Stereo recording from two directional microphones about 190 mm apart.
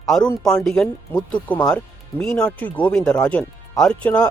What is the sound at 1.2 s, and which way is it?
Speech, 25° left (ahead or behind).